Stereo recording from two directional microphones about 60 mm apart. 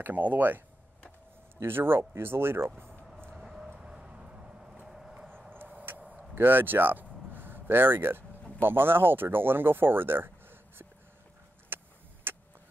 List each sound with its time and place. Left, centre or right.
0.0 s speech: right
1.6 s speech: right
3.8 s vehicle: centre
4.8 s horse: centre
5.5 s a sound: right
8.5 s speech: right
11.7 s vehicle: right